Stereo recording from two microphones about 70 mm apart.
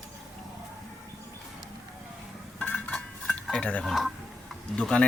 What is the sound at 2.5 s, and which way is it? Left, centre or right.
Dishes, left.